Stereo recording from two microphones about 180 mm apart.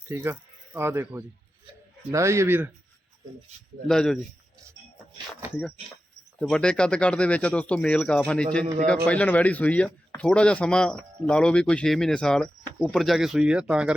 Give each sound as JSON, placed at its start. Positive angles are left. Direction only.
{"t": 0.1, "sound": "a man's voice", "side_deg": -10}
{"t": 3.8, "sound": "speech", "side_deg": 5}
{"t": 6.4, "sound": "speech", "side_deg": 5}